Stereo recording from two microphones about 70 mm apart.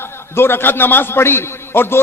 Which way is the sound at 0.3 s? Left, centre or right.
Left.